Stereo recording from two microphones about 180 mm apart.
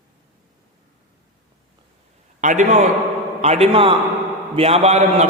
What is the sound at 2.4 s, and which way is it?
A man's voice, 40° right (ahead or behind).